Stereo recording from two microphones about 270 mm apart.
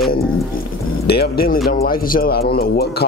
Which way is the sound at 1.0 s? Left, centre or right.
Left.